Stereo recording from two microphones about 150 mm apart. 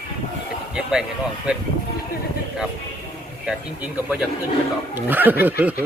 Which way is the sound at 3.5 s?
5° right (ahead or behind).